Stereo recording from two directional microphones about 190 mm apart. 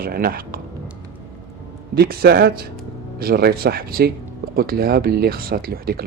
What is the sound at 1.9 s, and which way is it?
A man's voice, 55° right (ahead or behind).